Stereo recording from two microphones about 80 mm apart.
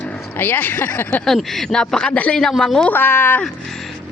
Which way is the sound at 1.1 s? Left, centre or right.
Centre.